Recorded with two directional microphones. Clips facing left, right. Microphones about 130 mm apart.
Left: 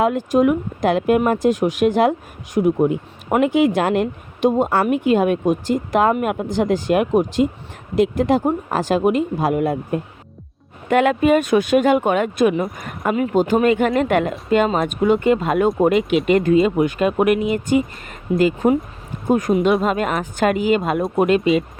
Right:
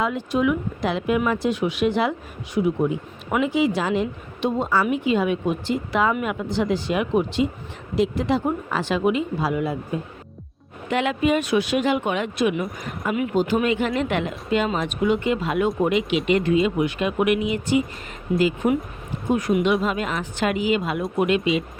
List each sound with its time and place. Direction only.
0.0 s speech: 50° left (ahead or behind)
3.4 s speech: 55° left (ahead or behind)